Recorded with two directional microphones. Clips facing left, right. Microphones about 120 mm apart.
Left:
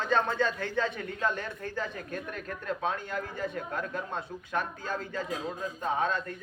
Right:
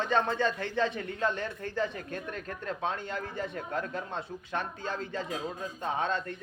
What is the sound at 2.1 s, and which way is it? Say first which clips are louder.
Speech: even; 35° right (ahead or behind).